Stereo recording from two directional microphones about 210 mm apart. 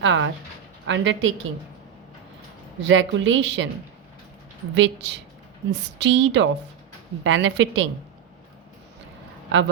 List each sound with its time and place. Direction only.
0.0 s a sound: 65° right (ahead or behind)
0.9 s a woman's voice: 65° right (ahead or behind)
2.8 s a woman's voice: 65° right (ahead or behind)
4.7 s a woman's voice: 60° right (ahead or behind)